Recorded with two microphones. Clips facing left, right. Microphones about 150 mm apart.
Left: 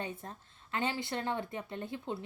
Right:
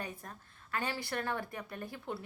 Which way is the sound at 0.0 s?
25° left (ahead or behind).